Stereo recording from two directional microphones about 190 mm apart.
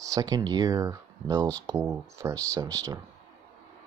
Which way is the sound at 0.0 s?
20° right (ahead or behind).